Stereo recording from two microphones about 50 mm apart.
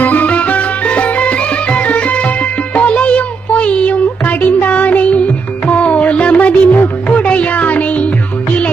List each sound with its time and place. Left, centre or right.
0.0 s music: left
6.5 s music: left